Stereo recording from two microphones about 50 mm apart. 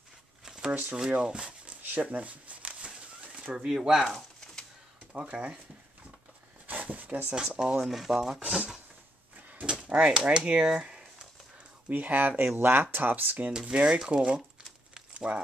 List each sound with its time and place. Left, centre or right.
0.7 s speech: right
1.2 s speech: centre
1.8 s a sound: right
3.5 s speech: centre
5.1 s speech: right
6.7 s a sound: right
7.3 s speech: centre
8.5 s speech: centre
9.6 s a sound: right
10.2 s speech: right
11.9 s speech: right
13.5 s speech: centre